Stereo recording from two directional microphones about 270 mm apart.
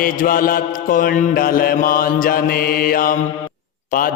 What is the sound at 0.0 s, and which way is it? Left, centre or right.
Mantra, left.